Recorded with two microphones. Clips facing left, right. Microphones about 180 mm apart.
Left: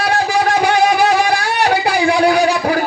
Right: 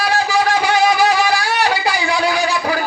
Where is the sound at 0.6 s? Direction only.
60° left (ahead or behind).